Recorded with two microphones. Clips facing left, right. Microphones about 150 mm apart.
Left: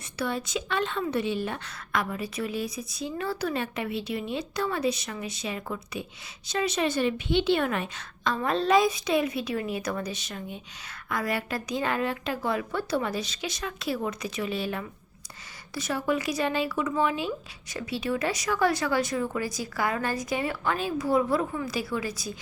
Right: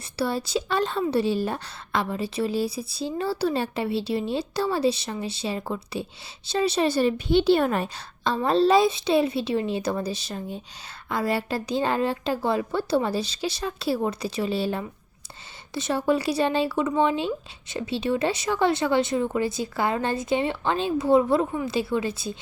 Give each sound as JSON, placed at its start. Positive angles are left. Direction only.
{"t": 0.2, "sound": "a woman's voice", "side_deg": -35}